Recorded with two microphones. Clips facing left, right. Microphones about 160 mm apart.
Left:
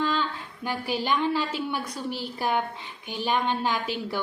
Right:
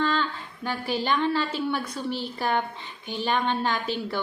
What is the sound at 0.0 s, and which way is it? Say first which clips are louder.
A woman's voice: right 1 dB; 10° left (ahead or behind).